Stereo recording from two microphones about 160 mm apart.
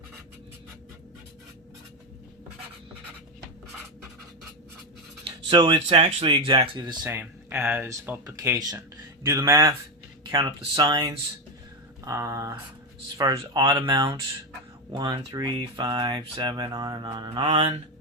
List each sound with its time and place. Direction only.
5.2 s speech: 30° right (ahead or behind)
7.1 s speech: 10° right (ahead or behind)
13.1 s speech: 30° right (ahead or behind)